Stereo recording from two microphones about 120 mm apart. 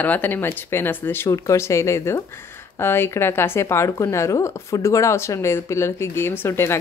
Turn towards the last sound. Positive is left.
turn(degrees=20)  # may be behind; listen again after turning